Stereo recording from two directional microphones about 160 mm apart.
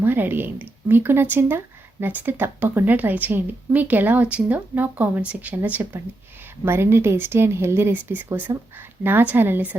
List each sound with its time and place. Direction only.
0.0 s speech: 10° right (ahead or behind)